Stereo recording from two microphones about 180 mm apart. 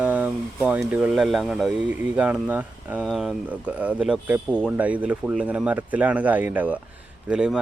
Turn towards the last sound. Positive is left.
turn(degrees=-5)  # may be behind; listen again after turning